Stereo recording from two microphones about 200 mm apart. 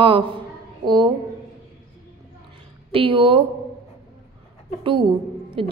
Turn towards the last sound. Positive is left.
turn(degrees=-25)  # may be behind; listen again after turning